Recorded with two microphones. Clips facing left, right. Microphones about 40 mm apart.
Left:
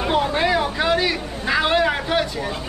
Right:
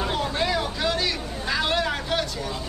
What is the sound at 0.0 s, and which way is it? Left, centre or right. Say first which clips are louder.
Vehicle: left 6 dB; left.